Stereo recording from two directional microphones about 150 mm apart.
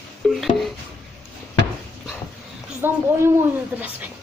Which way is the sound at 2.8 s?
15° right (ahead or behind).